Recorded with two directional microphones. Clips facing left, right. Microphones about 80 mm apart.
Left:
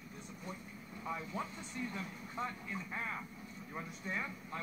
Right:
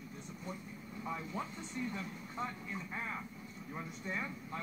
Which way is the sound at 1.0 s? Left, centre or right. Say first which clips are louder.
Even; centre.